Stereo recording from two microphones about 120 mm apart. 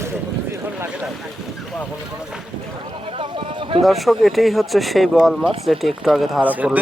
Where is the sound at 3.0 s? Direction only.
50° right (ahead or behind).